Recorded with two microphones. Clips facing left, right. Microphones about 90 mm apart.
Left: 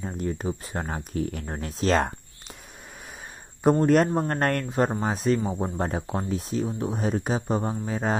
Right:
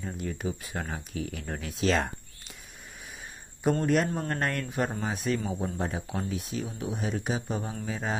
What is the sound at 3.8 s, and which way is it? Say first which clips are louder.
Speech: left 6 dB; 45° left (ahead or behind).